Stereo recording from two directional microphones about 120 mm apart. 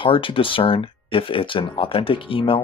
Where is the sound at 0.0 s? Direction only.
45° left (ahead or behind).